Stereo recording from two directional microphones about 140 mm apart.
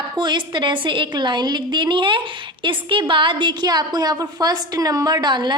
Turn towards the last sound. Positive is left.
turn(degrees=-30)  # may be behind; listen again after turning